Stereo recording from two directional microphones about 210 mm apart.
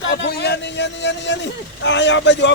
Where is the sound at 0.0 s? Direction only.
55° left (ahead or behind).